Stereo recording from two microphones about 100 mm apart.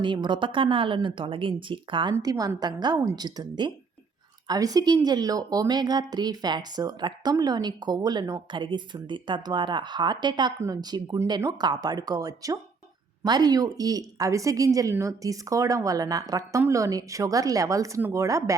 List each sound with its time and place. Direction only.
0.0 s a woman's voice: 55° right (ahead or behind)
2.2 s a woman's voice: 40° right (ahead or behind)